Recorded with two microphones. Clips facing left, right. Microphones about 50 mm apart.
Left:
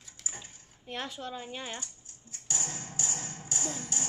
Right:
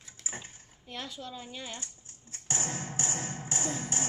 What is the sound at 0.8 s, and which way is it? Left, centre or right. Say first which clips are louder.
Speech: left 3 dB; left.